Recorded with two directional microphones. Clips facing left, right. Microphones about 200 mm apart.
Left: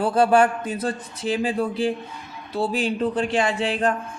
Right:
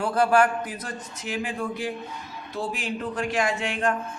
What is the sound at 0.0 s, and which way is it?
Speech, 30° left (ahead or behind).